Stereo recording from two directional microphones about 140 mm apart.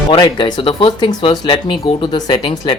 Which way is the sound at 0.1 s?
35° left (ahead or behind).